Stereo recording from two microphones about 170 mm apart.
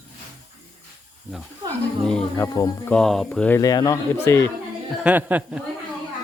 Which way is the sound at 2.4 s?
20° left (ahead or behind).